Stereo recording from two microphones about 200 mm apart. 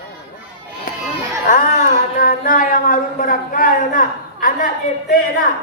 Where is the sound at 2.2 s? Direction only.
45° left (ahead or behind).